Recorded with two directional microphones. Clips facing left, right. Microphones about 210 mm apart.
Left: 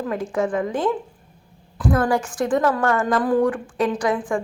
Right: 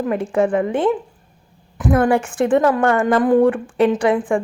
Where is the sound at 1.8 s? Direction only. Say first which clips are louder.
Right 4 dB; 25° right (ahead or behind).